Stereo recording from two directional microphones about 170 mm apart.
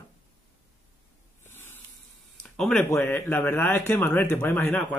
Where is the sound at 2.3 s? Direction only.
5° left (ahead or behind).